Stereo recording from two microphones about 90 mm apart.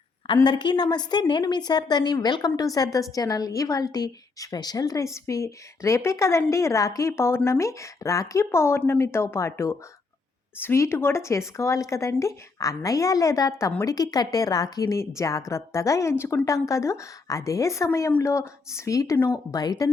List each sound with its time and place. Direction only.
0.4 s a woman's voice: 55° left (ahead or behind); by 19.1 s 35° left (ahead or behind)
19.1 s speech: 25° left (ahead or behind)
19.5 s a woman's voice: 45° left (ahead or behind)